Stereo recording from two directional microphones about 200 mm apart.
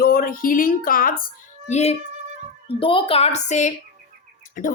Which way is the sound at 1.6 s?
35° left (ahead or behind).